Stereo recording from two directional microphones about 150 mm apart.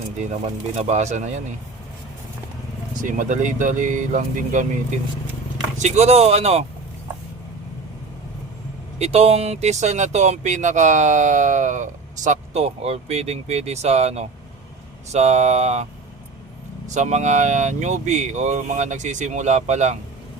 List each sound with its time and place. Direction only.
0.8 s speech: 50° right (ahead or behind)
2.9 s speech: 60° right (ahead or behind)
5.7 s speech: 50° right (ahead or behind)
9.0 s speech: 45° right (ahead or behind)
16.9 s speech: 50° right (ahead or behind)